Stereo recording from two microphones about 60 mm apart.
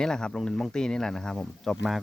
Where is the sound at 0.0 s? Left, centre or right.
Centre.